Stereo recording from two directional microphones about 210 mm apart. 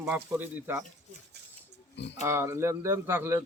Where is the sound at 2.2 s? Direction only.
15° right (ahead or behind).